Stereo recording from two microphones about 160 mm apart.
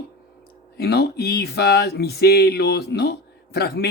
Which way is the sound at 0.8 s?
90° left.